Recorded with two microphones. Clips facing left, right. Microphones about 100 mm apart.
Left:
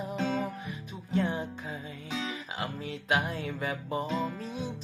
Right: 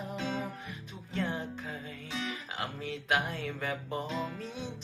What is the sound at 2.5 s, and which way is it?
Music, centre (ahead or behind).